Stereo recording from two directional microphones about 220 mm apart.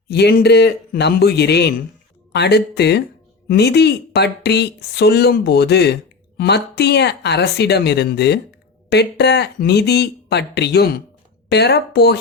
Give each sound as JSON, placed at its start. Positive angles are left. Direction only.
{"t": 0.1, "sound": "speech", "side_deg": 50}